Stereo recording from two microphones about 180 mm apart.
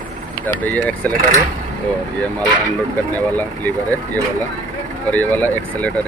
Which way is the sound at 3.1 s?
10° left (ahead or behind).